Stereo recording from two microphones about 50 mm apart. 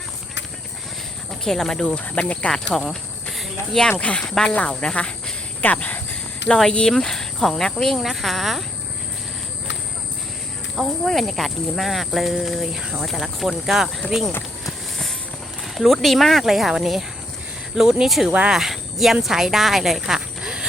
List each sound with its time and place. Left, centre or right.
1.3 s speech: centre
2.0 s speech: left
2.5 s cricket: centre
4.2 s speech: centre
5.6 s speech: left
6.6 s speech: centre
7.9 s speech: centre
10.8 s speech: centre
15.6 s speech: centre
18.3 s speech: right
18.5 s speech: centre